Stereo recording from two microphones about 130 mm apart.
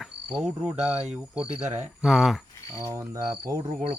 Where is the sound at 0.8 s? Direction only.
55° right (ahead or behind).